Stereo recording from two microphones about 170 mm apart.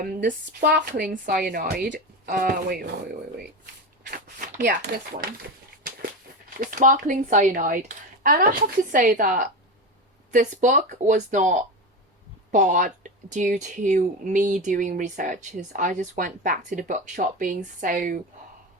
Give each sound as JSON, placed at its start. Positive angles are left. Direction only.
{"t": 0.0, "sound": "speech", "side_deg": -55}
{"t": 0.7, "sound": "speech", "side_deg": -70}
{"t": 4.1, "sound": "a sound", "side_deg": -55}
{"t": 6.6, "sound": "speech", "side_deg": -50}